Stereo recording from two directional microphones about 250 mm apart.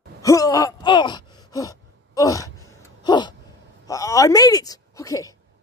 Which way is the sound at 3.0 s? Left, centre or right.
Centre.